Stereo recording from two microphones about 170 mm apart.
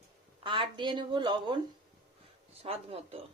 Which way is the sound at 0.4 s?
30° right (ahead or behind).